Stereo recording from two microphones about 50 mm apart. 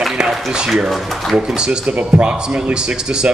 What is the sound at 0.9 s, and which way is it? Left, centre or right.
Speech, centre.